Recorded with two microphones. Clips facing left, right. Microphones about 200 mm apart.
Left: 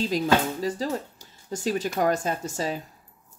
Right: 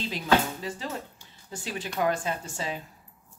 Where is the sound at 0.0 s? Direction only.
40° left (ahead or behind).